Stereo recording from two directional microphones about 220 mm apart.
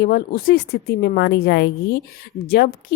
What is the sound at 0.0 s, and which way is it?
A woman's voice, 45° left (ahead or behind).